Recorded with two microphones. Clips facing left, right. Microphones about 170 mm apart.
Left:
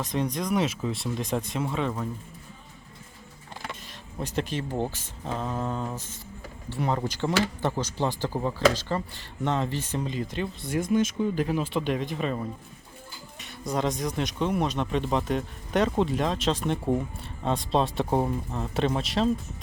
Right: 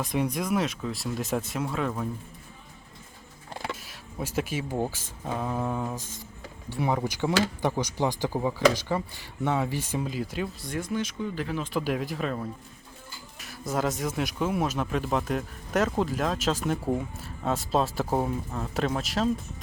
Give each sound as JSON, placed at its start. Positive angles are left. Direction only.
{"t": 0.0, "sound": "speech", "side_deg": -10}
{"t": 3.8, "sound": "speech", "side_deg": -5}
{"t": 10.9, "sound": "speech", "side_deg": 15}
{"t": 11.7, "sound": "speech", "side_deg": -5}